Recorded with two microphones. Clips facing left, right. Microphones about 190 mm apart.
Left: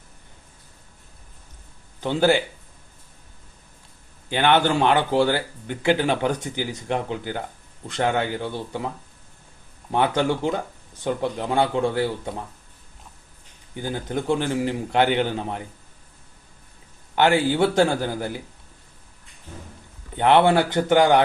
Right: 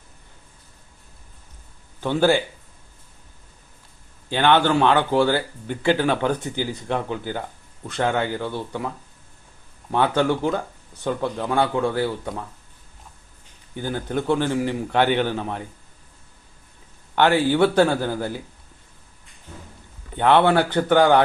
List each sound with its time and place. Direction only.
2.0 s speech: 15° left (ahead or behind)
4.3 s speech: 15° left (ahead or behind)
9.9 s speech: 15° left (ahead or behind)
13.7 s speech: 15° left (ahead or behind)
17.2 s speech: 10° left (ahead or behind)
20.1 s speech: 15° left (ahead or behind)